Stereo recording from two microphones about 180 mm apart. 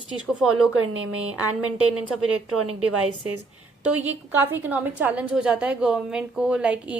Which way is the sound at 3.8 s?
10° right (ahead or behind).